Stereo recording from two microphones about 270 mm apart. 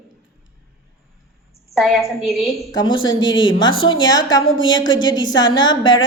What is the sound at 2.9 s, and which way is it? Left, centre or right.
Speech, left.